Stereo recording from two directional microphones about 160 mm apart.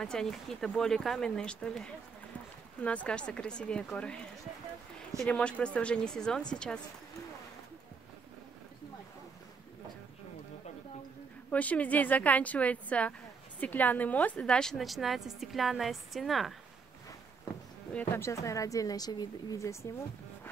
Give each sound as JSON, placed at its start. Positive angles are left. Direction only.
{"t": 0.0, "sound": "a woman's voice", "side_deg": 5}
{"t": 5.2, "sound": "a woman's voice", "side_deg": 5}
{"t": 11.5, "sound": "a woman's voice", "side_deg": 10}
{"t": 17.9, "sound": "speech", "side_deg": 15}